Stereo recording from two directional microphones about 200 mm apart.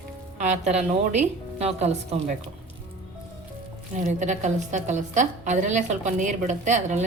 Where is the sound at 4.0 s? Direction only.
40° right (ahead or behind).